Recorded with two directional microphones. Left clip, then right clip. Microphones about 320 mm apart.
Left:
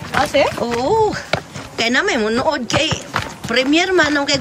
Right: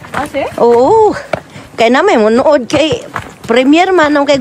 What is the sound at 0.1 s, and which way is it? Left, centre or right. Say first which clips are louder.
Speech: left 1 dB; centre.